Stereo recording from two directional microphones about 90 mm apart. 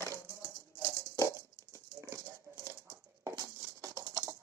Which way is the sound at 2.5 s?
25° right (ahead or behind).